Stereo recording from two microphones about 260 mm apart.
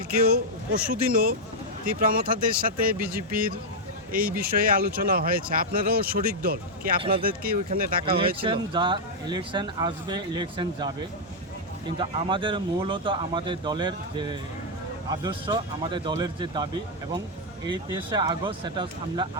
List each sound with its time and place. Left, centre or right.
0.1 s speech: right
8.0 s speech: centre
17.7 s speech: centre